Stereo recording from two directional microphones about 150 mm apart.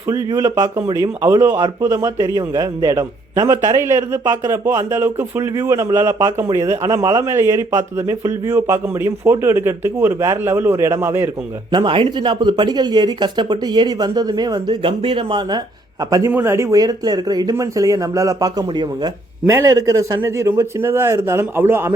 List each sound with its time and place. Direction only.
0.1 s a man's voice: 25° right (ahead or behind)
0.9 s a man's voice: 20° right (ahead or behind)
11.7 s a man's voice: 30° right (ahead or behind); by 21.9 s 15° right (ahead or behind)